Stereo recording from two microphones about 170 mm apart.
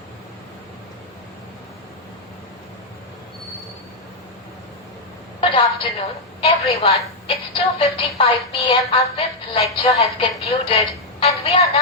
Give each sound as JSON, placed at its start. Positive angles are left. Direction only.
{"t": 5.4, "sound": "a woman's voice", "side_deg": 35}